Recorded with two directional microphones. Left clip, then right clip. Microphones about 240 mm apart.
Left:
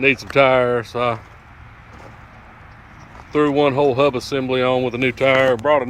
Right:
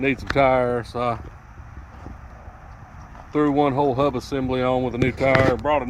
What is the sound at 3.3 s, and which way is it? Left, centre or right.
Speech, left.